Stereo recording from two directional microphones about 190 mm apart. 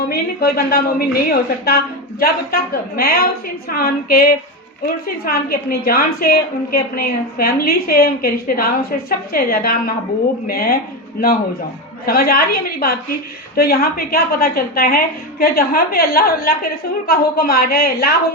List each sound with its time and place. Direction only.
0.1 s a woman's voice: 55° left (ahead or behind)
12.0 s a woman's voice: 50° left (ahead or behind)